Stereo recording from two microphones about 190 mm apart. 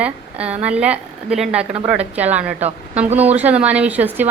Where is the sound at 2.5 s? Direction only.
35° right (ahead or behind).